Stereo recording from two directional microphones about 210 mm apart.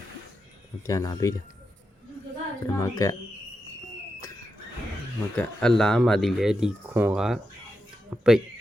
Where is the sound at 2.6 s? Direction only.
15° left (ahead or behind).